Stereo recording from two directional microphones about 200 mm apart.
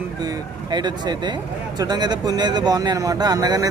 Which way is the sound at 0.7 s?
20° right (ahead or behind).